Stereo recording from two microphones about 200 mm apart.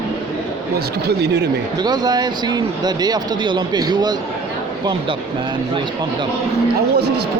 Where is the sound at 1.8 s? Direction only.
20° right (ahead or behind).